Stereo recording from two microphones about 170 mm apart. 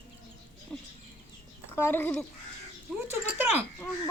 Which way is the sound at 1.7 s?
10° left (ahead or behind).